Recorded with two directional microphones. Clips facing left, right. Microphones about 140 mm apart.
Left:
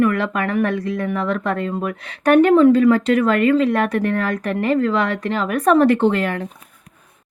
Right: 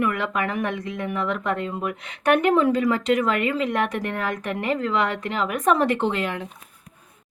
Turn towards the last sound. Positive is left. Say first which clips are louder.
# left 6 dB
turn(degrees=40)  # may be behind; listen again after turning